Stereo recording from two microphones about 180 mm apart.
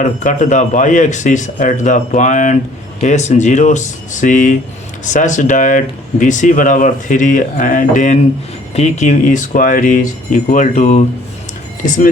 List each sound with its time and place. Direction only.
0.0 s speech: 45° left (ahead or behind)